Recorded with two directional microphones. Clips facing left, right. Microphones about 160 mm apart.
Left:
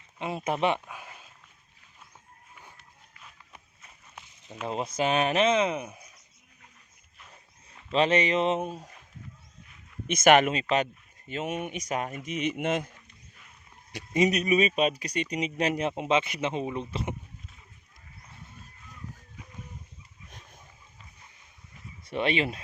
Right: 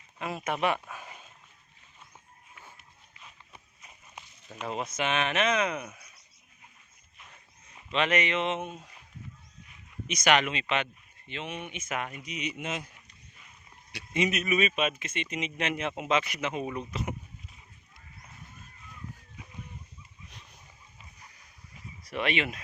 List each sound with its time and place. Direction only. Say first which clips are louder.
0.2 s speech: left 2 dB; 30° left (ahead or behind)
4.6 s speech: left 3 dB; 30° left (ahead or behind)
7.9 s speech: left 4 dB; 35° left (ahead or behind)
10.1 s speech: left 6 dB; 50° left (ahead or behind)
13.9 s speech: left 4 dB; 40° left (ahead or behind)
20.2 s a sound: left 3 dB; 50° left (ahead or behind)
22.0 s speech: left 3 dB; 30° left (ahead or behind)